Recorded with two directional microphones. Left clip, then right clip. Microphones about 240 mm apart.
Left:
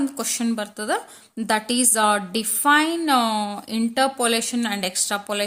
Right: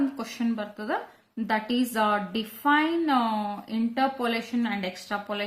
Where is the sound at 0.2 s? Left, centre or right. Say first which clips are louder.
Left 6 dB; left.